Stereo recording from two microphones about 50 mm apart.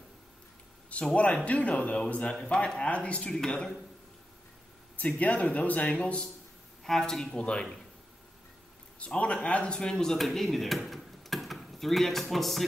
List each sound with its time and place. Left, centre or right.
0.8 s speech: left
3.3 s speech: centre
5.0 s speech: left
6.8 s speech: centre
7.3 s speech: left
9.0 s speech: left; by 10.8 s centre
10.9 s drawer open or close: centre